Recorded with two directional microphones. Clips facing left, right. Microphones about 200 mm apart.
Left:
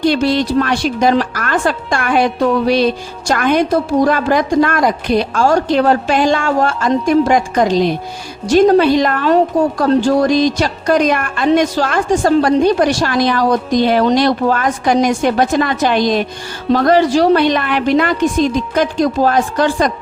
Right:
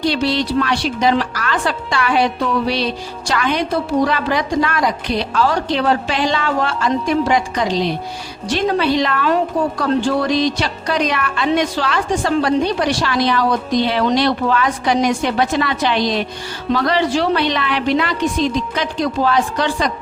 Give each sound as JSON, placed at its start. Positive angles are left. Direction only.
{"t": 0.0, "sound": "a woman's voice", "side_deg": 50}